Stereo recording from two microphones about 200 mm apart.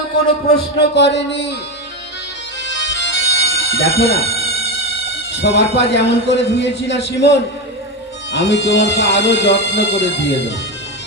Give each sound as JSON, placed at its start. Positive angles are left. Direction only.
{"t": 0.8, "sound": "speech", "side_deg": 60}
{"t": 2.6, "sound": "music", "side_deg": 65}
{"t": 5.3, "sound": "speech", "side_deg": 60}